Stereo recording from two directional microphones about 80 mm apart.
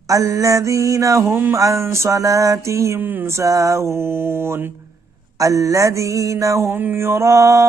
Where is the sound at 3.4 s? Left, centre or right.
Right.